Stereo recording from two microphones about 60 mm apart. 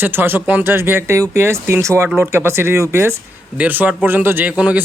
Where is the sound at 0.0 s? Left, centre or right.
Right.